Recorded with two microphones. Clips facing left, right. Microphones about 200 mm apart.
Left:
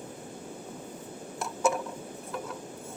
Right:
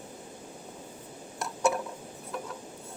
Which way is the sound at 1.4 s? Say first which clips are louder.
Even; centre (ahead or behind).